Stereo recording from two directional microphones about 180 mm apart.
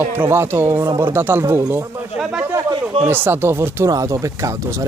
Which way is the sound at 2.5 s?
15° right (ahead or behind).